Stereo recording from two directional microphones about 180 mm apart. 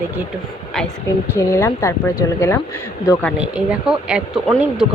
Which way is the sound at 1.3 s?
15° left (ahead or behind).